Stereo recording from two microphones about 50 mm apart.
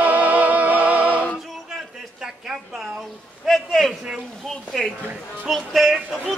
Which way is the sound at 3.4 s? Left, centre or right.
Centre.